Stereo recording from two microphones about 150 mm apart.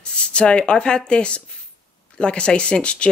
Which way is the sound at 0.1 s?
5° left (ahead or behind).